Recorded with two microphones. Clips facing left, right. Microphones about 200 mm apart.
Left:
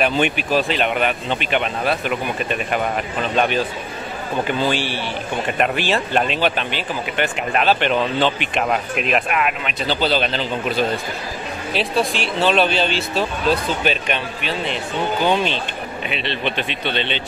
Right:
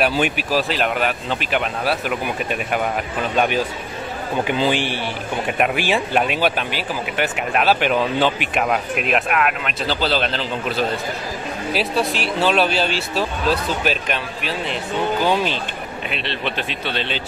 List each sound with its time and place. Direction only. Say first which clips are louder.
0.0 s a man's voice: left 1 dB; 5° right (ahead or behind)